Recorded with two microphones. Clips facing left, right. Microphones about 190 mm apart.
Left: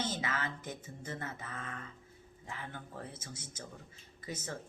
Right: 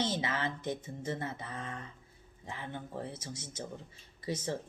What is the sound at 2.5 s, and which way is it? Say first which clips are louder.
Speech: right 4 dB; 25° right (ahead or behind).